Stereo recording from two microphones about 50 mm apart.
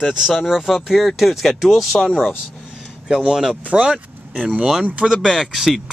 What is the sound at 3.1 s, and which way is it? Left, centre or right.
Speech, centre.